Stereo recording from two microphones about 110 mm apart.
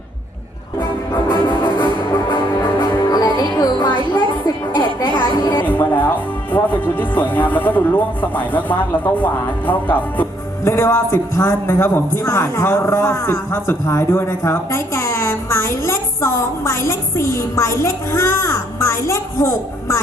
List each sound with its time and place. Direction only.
0.8 s music: 40° left (ahead or behind)
5.6 s music: 15° left (ahead or behind)
6.5 s speech: 15° left (ahead or behind)